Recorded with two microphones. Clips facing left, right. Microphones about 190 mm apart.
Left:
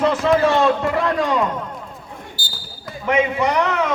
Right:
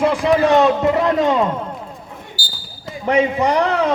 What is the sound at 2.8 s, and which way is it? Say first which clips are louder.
A man's voice: right 2 dB; 35° right (ahead or behind).